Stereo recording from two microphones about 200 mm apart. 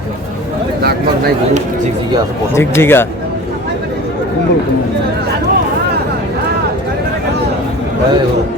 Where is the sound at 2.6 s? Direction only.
10° left (ahead or behind).